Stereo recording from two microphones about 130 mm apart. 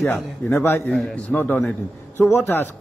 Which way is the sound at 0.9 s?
Centre (ahead or behind).